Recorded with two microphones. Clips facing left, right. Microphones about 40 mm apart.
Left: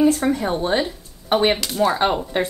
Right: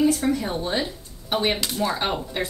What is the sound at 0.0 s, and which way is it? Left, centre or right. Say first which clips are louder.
A woman's voice: left 4 dB; left.